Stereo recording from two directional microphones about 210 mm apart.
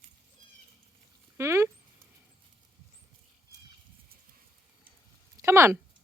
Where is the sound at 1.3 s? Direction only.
15° right (ahead or behind).